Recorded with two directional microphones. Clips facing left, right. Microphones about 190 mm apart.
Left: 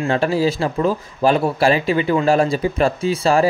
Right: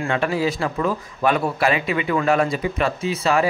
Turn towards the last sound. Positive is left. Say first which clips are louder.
# left 4 dB
turn(degrees=30)  # may be behind; listen again after turning